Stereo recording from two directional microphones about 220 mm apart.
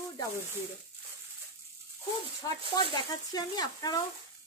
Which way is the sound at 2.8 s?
20° left (ahead or behind).